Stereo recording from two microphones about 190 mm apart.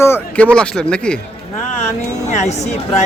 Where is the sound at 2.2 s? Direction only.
35° left (ahead or behind).